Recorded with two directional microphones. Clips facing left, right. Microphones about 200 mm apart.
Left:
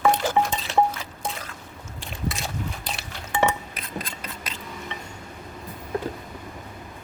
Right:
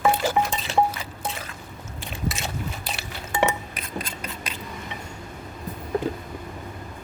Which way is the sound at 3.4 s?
15° right (ahead or behind).